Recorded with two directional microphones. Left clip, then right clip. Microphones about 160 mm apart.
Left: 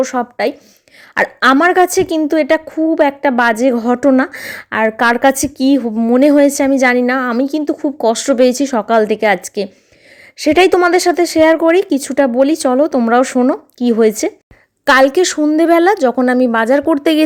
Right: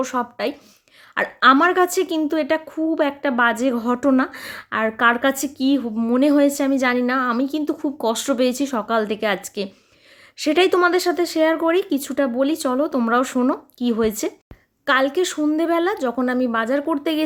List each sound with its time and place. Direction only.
0.0 s a woman's voice: 30° left (ahead or behind)
14.8 s speech: 45° left (ahead or behind)